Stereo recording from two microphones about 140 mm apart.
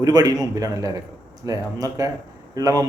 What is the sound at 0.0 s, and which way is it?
Speech, 25° right (ahead or behind).